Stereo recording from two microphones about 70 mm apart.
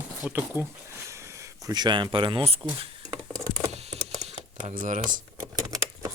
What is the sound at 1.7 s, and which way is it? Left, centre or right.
Speech, right.